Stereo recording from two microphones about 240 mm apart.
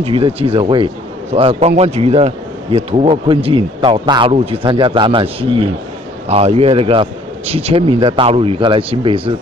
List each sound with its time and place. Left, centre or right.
0.0 s speech: right